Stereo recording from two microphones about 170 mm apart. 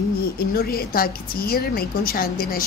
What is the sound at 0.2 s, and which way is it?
A woman's voice, 65° left (ahead or behind).